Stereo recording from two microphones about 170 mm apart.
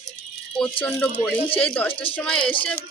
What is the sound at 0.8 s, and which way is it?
A child's voice, 5° left (ahead or behind).